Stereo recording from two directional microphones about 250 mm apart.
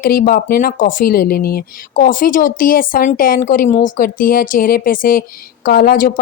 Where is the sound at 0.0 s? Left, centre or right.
Left.